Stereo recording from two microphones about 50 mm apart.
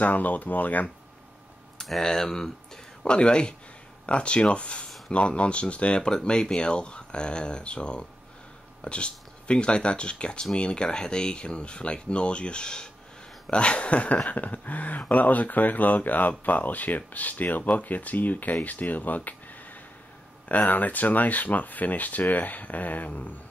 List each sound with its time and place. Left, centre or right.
0.0 s speech: left
1.8 s speech: centre; by 23.3 s left